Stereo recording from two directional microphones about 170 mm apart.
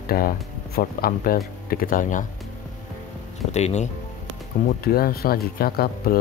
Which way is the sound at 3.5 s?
40° left (ahead or behind).